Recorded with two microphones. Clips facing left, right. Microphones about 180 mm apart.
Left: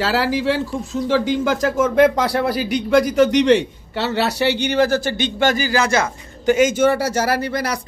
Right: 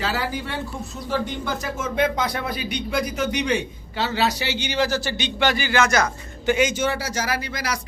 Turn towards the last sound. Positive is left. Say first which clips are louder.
# left 6 dB
turn(degrees=55)  # may be behind; listen again after turning